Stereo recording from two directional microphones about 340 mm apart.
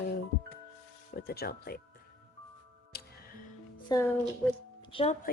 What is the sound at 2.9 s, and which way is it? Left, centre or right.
Music, left.